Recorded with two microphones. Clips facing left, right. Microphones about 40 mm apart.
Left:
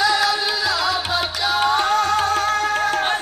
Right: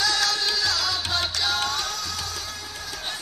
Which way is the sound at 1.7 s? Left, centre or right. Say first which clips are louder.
Left 12 dB; left.